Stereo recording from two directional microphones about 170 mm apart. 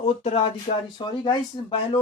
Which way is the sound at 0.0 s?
35° left (ahead or behind).